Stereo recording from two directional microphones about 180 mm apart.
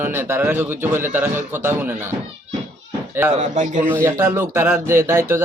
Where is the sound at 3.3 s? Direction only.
40° right (ahead or behind).